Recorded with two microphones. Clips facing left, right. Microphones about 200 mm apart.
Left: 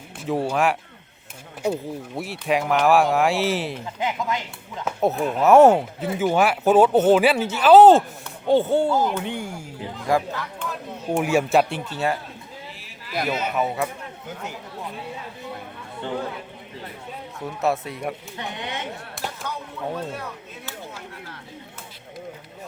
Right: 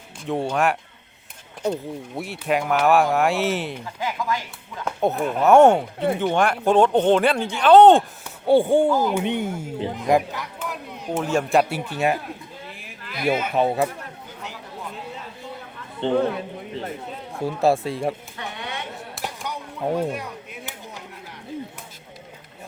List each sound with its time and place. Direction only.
0.3 s speech: centre (ahead or behind)
3.8 s speech: 20° left (ahead or behind)
4.9 s speech: centre (ahead or behind)
8.4 s speech: 10° right (ahead or behind)
10.6 s a sound: 5° right (ahead or behind)
11.2 s speech: 10° left (ahead or behind)
11.9 s speech: 15° right (ahead or behind)
13.6 s speech: 30° right (ahead or behind)
16.0 s speech: 25° right (ahead or behind)
17.4 s speech: 30° right (ahead or behind)
18.3 s speech: 20° left (ahead or behind)
19.2 s chop: 15° right (ahead or behind)